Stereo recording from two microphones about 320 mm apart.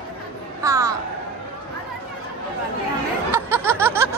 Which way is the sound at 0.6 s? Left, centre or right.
Centre.